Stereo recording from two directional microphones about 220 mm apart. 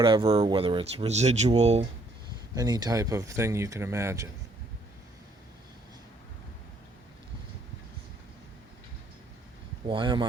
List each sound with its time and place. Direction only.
0.0 s speech: 20° right (ahead or behind)
2.6 s speech: 15° right (ahead or behind)
9.8 s speech: 20° right (ahead or behind)